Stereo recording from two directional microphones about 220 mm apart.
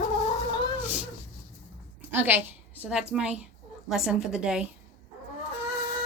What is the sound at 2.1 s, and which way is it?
A woman's voice, 10° right (ahead or behind).